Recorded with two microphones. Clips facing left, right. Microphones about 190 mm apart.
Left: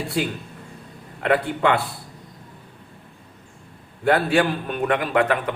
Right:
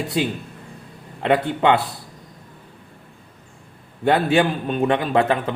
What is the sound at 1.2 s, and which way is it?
Speech, 25° right (ahead or behind).